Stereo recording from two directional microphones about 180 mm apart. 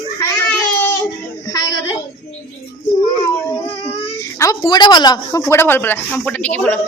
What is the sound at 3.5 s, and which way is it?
Baby cry, 15° left (ahead or behind).